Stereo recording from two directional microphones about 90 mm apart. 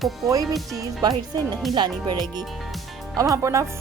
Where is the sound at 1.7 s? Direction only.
55° right (ahead or behind).